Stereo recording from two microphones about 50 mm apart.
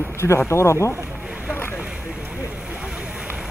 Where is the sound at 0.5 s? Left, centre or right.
Left.